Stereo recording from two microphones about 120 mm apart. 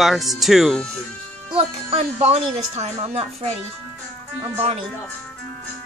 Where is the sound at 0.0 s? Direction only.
Centre (ahead or behind).